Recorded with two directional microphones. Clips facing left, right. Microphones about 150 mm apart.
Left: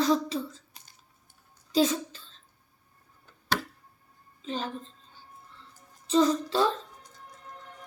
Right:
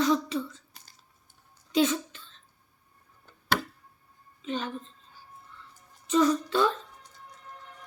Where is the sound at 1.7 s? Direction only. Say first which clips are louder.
Even; 35° left (ahead or behind).